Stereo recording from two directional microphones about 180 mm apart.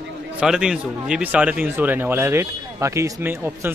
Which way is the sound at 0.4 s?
5° right (ahead or behind).